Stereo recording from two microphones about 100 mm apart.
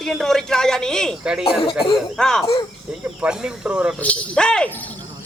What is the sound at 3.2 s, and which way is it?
Speech, 10° right (ahead or behind).